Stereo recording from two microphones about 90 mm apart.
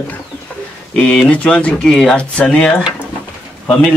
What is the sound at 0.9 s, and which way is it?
Speech, 10° left (ahead or behind).